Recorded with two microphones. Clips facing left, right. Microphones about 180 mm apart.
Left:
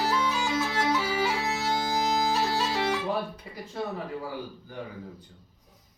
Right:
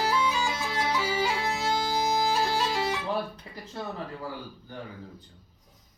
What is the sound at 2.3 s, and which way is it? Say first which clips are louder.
Bagpipes: even; centre (ahead or behind).